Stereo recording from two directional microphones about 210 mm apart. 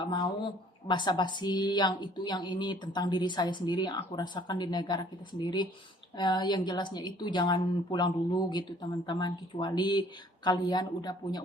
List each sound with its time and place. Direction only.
0.0 s a woman's voice: 20° left (ahead or behind)